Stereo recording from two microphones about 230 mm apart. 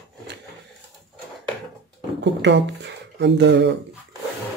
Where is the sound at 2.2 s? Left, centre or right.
Right.